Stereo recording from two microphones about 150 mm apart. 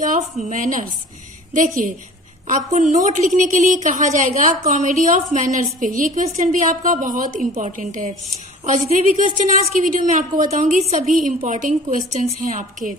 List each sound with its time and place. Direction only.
0.0 s a woman's voice: 60° right (ahead or behind)
2.4 s a woman's voice: 55° right (ahead or behind)